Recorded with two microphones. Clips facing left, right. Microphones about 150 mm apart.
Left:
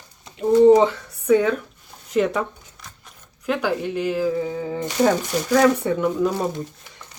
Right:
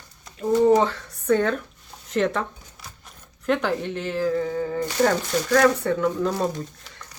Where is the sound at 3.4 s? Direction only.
5° left (ahead or behind).